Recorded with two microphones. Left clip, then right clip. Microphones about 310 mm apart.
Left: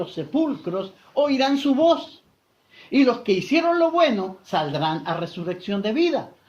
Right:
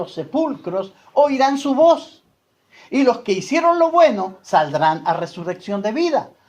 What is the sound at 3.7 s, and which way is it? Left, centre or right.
Speech, right.